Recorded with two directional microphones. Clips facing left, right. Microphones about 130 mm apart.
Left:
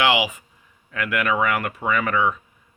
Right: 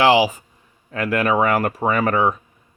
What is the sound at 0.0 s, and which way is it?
Speech, 35° right (ahead or behind).